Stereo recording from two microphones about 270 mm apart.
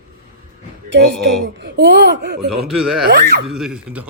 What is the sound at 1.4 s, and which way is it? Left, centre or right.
Speech, right.